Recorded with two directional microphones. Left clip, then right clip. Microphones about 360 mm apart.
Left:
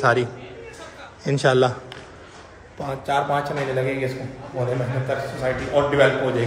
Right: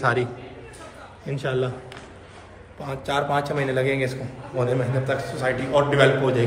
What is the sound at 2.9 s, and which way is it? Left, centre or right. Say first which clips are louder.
A man's voice: left 2 dB; centre.